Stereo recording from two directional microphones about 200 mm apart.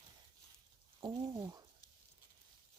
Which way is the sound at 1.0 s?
20° right (ahead or behind).